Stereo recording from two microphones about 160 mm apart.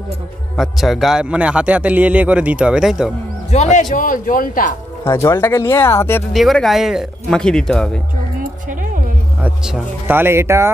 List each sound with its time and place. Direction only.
0.6 s speech: centre (ahead or behind)
3.4 s a man's voice: 45° left (ahead or behind)
3.9 s speech: 60° left (ahead or behind)
5.0 s speech: 15° left (ahead or behind)
6.3 s speech: centre (ahead or behind)
8.4 s a sound: 55° right (ahead or behind)
9.4 s speech: 5° right (ahead or behind)